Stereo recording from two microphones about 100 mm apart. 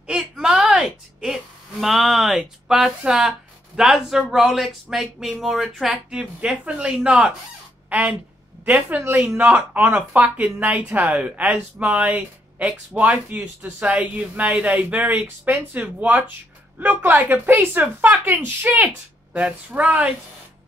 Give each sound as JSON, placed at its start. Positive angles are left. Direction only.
{"t": 0.0, "sound": "a woman's voice", "side_deg": -10}